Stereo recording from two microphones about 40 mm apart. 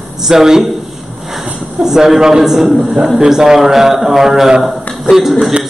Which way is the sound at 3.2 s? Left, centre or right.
Centre.